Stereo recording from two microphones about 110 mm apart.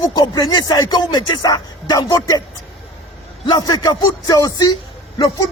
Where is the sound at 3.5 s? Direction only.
40° left (ahead or behind).